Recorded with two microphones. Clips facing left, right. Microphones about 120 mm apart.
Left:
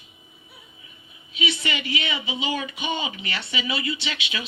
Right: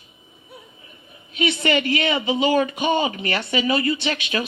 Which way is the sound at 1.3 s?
50° right (ahead or behind).